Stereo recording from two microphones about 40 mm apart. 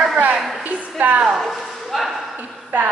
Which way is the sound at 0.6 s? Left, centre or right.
Right.